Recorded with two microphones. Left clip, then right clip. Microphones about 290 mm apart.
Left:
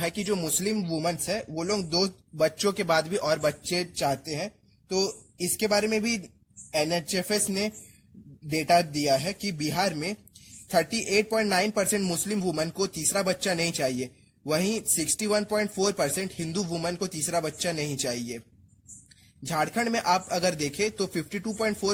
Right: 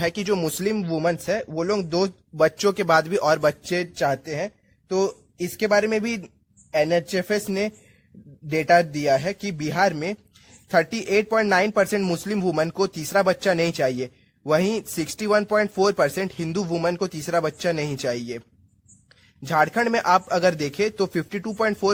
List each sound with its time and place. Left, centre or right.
0.0 s speech: right
19.5 s speech: right